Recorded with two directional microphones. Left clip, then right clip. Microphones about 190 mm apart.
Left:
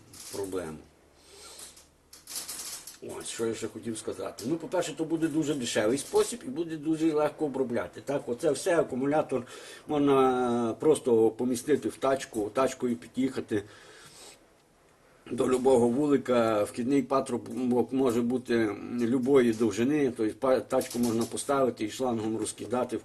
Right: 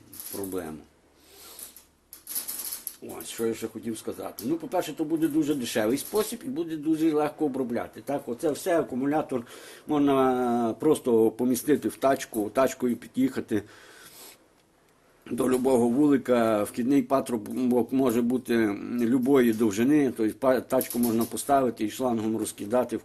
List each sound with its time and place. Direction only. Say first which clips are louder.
3.3 s speech: right 3 dB; 30° right (ahead or behind)
5.4 s speech: right 2 dB; 30° right (ahead or behind)
15.4 s speech: even; 35° right (ahead or behind)